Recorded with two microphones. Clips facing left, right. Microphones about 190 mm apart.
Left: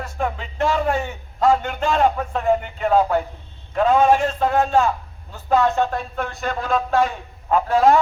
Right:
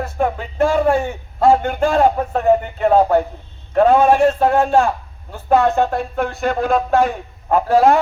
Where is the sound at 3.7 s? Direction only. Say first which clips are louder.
Right 4 dB; 50° right (ahead or behind).